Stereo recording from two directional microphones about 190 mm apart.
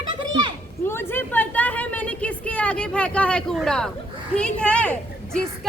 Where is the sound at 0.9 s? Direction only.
10° left (ahead or behind).